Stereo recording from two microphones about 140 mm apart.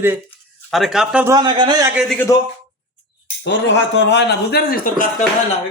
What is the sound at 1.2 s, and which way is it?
Speech, 30° right (ahead or behind).